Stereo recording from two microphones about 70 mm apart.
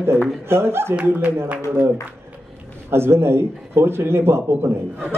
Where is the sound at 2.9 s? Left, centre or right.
Right.